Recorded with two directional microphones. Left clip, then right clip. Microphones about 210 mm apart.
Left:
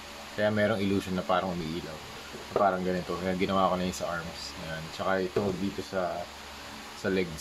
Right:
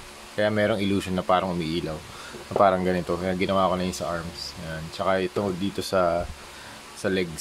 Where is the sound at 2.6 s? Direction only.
35° right (ahead or behind).